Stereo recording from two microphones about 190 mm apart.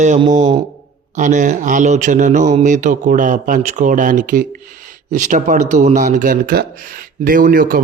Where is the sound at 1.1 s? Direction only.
40° right (ahead or behind).